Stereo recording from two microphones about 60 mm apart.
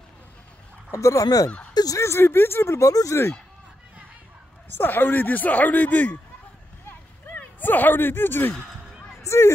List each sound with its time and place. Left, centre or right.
0.9 s speech: left
2.0 s speech: left
2.8 s speech: left
4.7 s speech: left
6.9 s a sound: left
9.2 s speech: left